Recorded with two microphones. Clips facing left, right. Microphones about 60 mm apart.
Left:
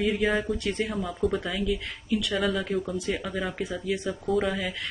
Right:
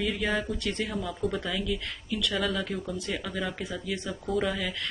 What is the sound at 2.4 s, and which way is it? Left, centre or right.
Speech, centre.